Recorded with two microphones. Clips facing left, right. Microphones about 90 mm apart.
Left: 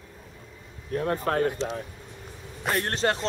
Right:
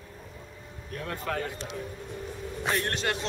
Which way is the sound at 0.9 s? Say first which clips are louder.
Left 7 dB; 35° left (ahead or behind).